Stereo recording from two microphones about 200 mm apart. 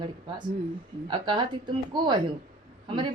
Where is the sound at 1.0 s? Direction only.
25° right (ahead or behind).